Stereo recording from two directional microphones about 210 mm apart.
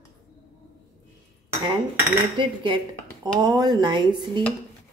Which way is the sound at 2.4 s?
20° right (ahead or behind).